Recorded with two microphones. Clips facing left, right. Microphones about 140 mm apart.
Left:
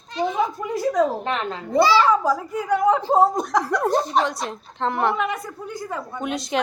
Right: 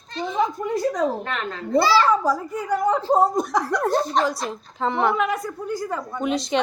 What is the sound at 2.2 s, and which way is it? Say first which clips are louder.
A woman's voice: left 1 dB; centre (ahead or behind).